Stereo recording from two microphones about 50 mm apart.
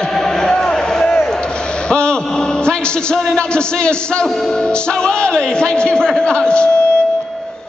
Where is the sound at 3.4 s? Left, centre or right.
Centre.